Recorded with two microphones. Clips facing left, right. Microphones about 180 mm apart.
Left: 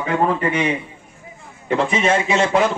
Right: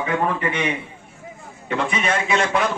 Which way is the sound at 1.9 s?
25° left (ahead or behind).